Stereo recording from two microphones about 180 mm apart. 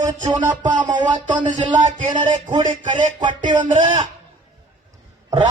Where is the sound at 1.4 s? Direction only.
25° right (ahead or behind).